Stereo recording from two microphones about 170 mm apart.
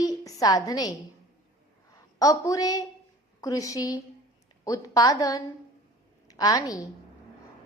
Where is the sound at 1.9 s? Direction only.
20° left (ahead or behind).